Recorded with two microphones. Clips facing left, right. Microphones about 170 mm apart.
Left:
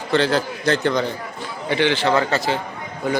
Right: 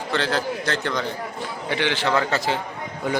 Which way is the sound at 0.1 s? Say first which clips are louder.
Left 5 dB; centre (ahead or behind).